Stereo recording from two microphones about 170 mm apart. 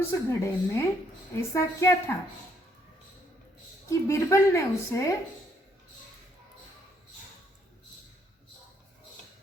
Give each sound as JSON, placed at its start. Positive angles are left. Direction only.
{"t": 0.1, "sound": "a woman's voice", "side_deg": 15}
{"t": 3.8, "sound": "a woman's voice", "side_deg": 15}